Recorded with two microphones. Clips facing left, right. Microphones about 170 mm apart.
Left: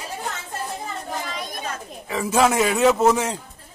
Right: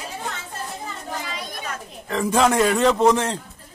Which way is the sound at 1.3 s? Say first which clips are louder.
Left 1 dB; 45° left (ahead or behind).